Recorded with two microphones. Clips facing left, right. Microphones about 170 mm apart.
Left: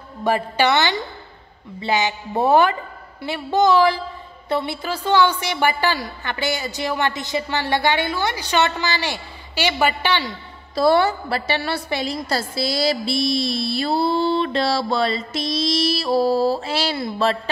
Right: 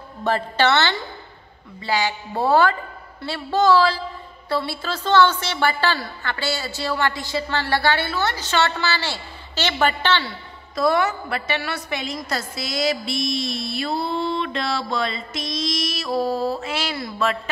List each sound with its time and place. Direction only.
0.2 s a woman's voice: 10° left (ahead or behind)
10.7 s a woman's voice: 30° left (ahead or behind)